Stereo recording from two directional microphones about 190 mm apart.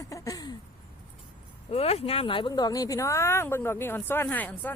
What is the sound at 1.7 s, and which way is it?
Speech, 30° left (ahead or behind).